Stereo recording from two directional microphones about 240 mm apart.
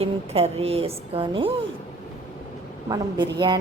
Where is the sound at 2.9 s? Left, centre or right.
Centre.